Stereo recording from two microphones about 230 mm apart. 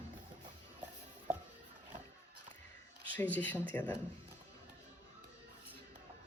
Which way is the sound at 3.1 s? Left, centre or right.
Centre.